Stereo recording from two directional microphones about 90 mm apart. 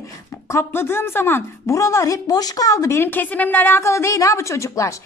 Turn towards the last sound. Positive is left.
turn(degrees=35)  # may be behind; listen again after turning